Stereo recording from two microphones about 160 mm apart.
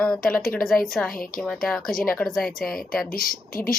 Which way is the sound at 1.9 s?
65° left (ahead or behind).